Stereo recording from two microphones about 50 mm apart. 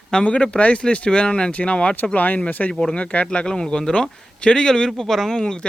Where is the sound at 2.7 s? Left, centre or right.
Centre.